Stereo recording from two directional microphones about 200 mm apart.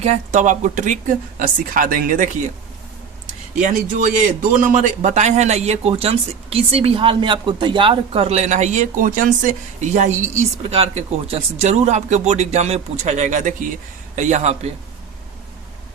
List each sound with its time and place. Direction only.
0.0 s speech: 35° right (ahead or behind)
3.6 s speech: 40° right (ahead or behind)